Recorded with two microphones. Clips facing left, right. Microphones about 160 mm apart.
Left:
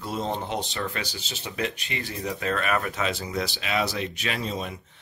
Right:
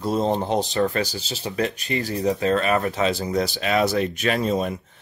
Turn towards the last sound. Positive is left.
turn(degrees=-45)  # may be behind; listen again after turning